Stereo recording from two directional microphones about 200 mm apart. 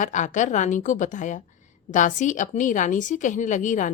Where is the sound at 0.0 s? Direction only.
40° left (ahead or behind).